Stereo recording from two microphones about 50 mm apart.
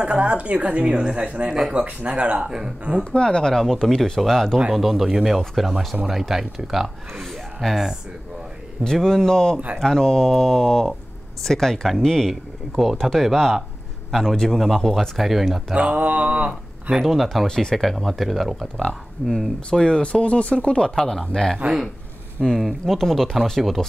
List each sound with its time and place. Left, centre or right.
0.0 s a woman's voice: right
3.0 s speech: centre
4.7 s speech: centre
5.4 s speech: centre
7.6 s speech: centre
8.9 s speech: centre
12.3 s speech: centre
15.7 s a woman's voice: right
17.0 s speech: centre
17.5 s speech: centre
19.7 s speech: centre